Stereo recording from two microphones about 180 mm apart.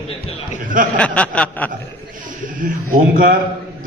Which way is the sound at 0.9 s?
5° left (ahead or behind).